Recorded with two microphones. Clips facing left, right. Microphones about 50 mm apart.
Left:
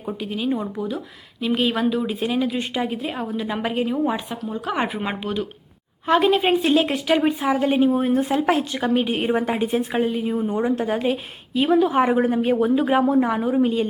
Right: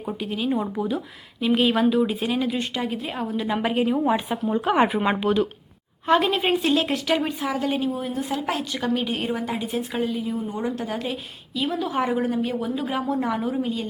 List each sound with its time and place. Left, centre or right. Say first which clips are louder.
0.0 s a woman's voice: left 1 dB; centre; by 7.9 s left
7.9 s a woman's voice: left 7 dB; left
9.3 s a woman's voice: left 5 dB; left
11.5 s a woman's voice: left 7 dB; left
13.1 s a woman's voice: left 6 dB; centre